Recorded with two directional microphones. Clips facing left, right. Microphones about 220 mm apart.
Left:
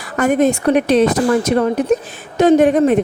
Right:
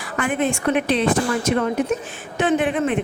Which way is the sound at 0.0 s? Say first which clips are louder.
Left 8 dB; 40° left (ahead or behind).